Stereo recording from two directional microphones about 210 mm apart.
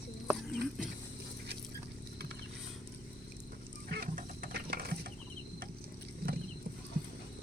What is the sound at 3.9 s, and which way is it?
Music, 45° right (ahead or behind).